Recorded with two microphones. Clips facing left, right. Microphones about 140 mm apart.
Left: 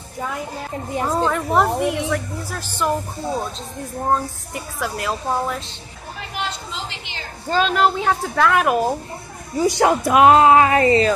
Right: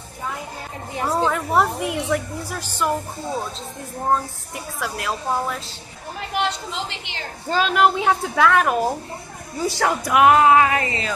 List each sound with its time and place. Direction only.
1.0 s a woman's voice: 5° right (ahead or behind)
4.1 s speech: centre (ahead or behind)
6.4 s a sound: 70° right (ahead or behind)
7.5 s a woman's voice: 5° right (ahead or behind)
8.4 s speech: 5° left (ahead or behind)
9.6 s speech: 20° left (ahead or behind); by 11.1 s 40° left (ahead or behind)